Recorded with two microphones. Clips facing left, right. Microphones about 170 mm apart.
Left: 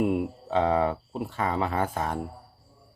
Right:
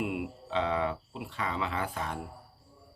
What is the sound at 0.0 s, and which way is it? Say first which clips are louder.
Speech: left 8 dB; 40° left (ahead or behind).